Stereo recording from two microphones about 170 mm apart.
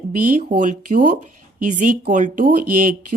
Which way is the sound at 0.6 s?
50° right (ahead or behind).